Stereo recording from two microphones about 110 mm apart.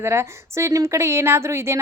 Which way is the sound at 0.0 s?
25° right (ahead or behind).